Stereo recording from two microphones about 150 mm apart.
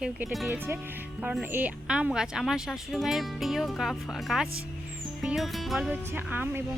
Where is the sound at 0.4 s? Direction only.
15° right (ahead or behind); by 5.9 s centre (ahead or behind).